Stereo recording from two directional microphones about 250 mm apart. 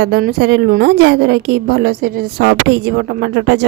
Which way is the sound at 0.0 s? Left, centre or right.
Right.